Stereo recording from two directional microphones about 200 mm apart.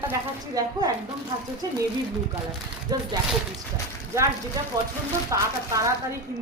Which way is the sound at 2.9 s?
20° right (ahead or behind).